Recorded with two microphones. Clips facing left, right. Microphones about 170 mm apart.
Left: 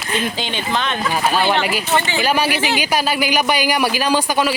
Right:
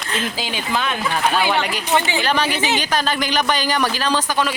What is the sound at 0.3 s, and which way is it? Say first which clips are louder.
Speech: left 1 dB; 5° right (ahead or behind).